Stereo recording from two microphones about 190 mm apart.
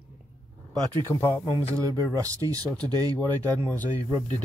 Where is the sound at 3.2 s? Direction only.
10° left (ahead or behind).